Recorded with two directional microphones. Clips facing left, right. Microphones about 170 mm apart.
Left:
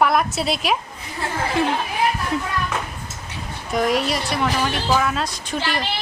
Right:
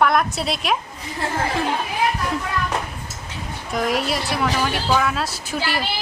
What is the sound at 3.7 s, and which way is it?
A woman's voice, centre (ahead or behind).